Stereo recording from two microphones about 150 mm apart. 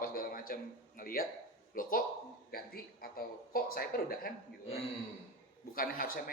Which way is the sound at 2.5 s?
85° left.